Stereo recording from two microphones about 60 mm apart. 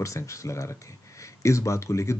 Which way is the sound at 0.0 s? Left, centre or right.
Left.